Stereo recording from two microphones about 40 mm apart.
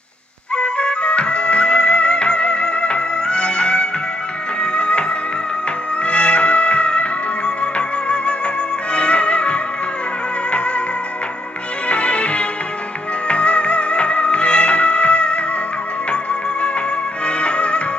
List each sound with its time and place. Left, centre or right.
0.6 s music: left
6.0 s music: left
11.9 s music: left
17.3 s music: left